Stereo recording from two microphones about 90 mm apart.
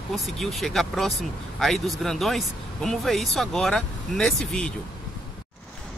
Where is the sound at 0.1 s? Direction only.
Centre (ahead or behind).